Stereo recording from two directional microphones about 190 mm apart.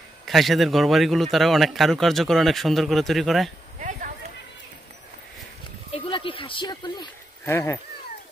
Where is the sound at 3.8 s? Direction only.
40° right (ahead or behind).